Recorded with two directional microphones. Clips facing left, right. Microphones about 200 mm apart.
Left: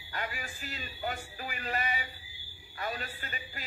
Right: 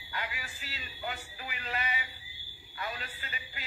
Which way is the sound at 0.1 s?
45° left (ahead or behind).